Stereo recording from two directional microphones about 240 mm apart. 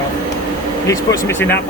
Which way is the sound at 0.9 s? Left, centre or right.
Centre.